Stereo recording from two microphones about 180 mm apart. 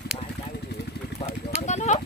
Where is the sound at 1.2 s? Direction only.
40° left (ahead or behind).